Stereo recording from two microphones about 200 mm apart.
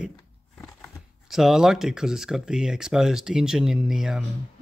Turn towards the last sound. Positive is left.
turn(degrees=0)  # may be behind; listen again after turning